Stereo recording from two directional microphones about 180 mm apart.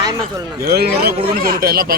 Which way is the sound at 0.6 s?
60° right (ahead or behind).